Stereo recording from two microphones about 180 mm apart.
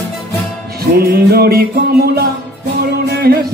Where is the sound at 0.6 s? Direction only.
60° right (ahead or behind).